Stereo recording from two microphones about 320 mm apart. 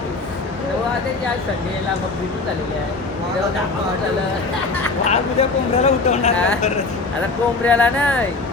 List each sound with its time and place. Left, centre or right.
5.0 s speech: left
7.6 s speech: centre